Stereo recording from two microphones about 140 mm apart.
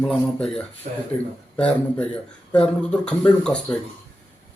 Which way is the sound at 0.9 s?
65° right (ahead or behind).